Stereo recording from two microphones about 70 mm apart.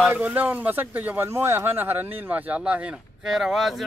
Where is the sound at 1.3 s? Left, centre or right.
Right; by 2.9 s centre.